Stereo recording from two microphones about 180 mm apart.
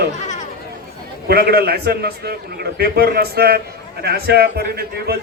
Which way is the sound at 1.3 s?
60° right (ahead or behind).